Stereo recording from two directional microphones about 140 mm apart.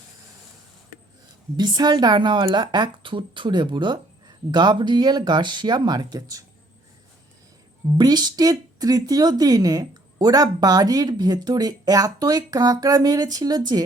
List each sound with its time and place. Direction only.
1.5 s a woman's voice: 30° right (ahead or behind)
7.9 s a woman's voice: 30° right (ahead or behind)